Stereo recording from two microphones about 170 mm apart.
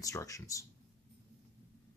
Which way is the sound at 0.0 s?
20° left (ahead or behind).